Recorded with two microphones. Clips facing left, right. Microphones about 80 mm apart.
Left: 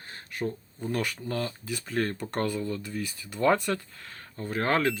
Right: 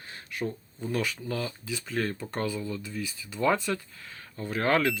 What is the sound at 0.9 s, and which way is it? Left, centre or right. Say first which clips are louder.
Speech: even; left.